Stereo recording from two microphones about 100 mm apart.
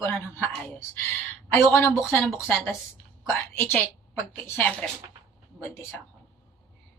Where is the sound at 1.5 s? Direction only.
25° left (ahead or behind).